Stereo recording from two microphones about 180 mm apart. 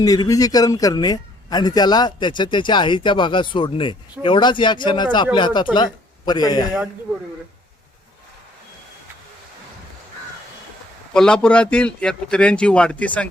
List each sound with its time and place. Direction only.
0.0 s a man's voice: 20° left (ahead or behind)
11.1 s a man's voice: 5° left (ahead or behind)